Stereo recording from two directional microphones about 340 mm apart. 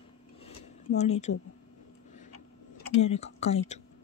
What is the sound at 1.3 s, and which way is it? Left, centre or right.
Speech, left.